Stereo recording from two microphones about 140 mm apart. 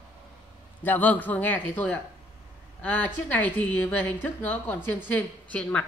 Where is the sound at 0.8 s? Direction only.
10° left (ahead or behind).